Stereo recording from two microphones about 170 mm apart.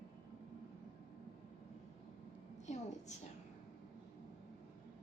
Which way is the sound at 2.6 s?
40° left (ahead or behind).